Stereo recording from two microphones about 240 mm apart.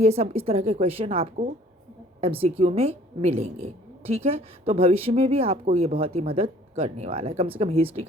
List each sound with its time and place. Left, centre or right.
0.0 s a woman's voice: right